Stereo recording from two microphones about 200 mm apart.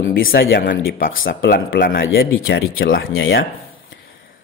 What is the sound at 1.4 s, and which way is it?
A man's voice, 65° left (ahead or behind).